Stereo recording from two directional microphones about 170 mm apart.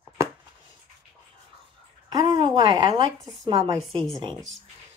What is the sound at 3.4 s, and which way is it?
Speech, 30° right (ahead or behind).